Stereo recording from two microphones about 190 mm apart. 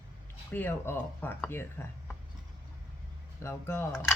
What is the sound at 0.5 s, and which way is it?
Speech, 10° left (ahead or behind).